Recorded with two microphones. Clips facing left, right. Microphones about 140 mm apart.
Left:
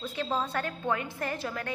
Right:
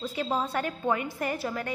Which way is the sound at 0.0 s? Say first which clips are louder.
Right 2 dB; 10° right (ahead or behind).